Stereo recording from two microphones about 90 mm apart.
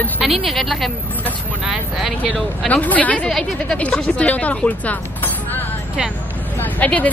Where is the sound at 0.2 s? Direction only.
Centre (ahead or behind).